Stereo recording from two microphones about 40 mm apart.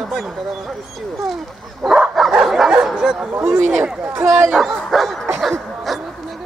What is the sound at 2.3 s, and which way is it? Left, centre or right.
Dog, centre.